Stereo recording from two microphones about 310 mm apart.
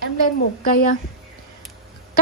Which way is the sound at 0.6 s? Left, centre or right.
Left.